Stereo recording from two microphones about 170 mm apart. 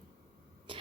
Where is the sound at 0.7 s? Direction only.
30° right (ahead or behind).